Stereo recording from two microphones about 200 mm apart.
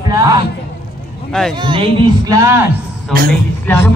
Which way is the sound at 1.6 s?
25° right (ahead or behind).